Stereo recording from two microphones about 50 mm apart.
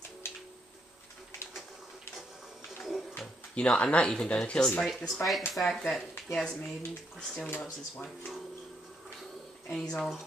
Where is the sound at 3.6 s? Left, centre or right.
Left.